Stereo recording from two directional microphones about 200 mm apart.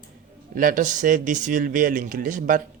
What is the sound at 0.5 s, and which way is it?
Speech, 40° right (ahead or behind).